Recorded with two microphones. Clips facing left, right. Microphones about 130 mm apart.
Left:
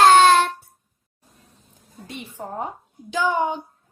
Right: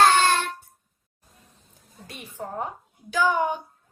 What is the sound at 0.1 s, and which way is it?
Child singing, 80° left.